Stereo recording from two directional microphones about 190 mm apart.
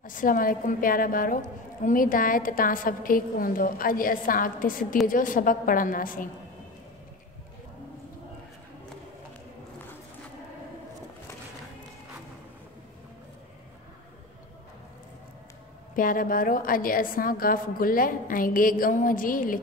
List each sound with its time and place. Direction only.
0.0 s a woman's voice: 45° left (ahead or behind)
16.0 s a woman's voice: 45° left (ahead or behind)